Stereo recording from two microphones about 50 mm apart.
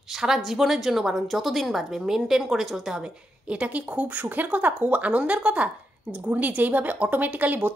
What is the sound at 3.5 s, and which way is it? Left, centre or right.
A woman's voice, right.